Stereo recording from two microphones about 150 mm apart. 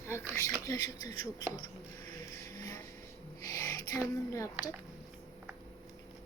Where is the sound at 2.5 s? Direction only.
20° left (ahead or behind).